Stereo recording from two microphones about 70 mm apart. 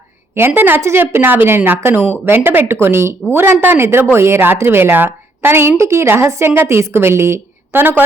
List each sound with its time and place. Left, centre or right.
0.3 s a woman's voice: right